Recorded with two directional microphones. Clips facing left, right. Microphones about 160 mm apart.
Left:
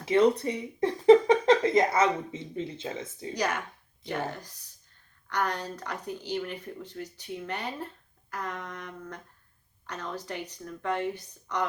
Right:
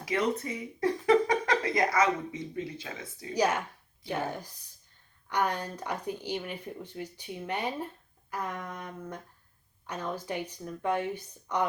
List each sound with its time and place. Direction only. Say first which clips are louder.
0.1 s speech: left 7 dB; 30° left (ahead or behind)
3.3 s speech: right 4 dB; 10° right (ahead or behind)